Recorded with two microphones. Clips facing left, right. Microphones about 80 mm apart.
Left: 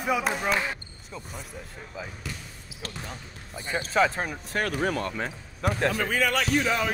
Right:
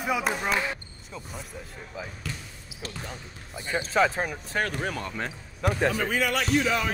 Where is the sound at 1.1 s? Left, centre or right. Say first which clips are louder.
Even; centre.